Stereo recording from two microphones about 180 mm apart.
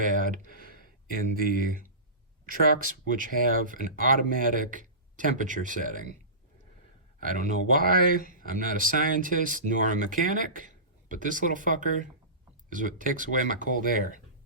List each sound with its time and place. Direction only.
0.0 s a sound: 45° right (ahead or behind)
1.4 s speech: 50° right (ahead or behind)
3.1 s speech: 50° right (ahead or behind)
7.2 s speech: 50° right (ahead or behind)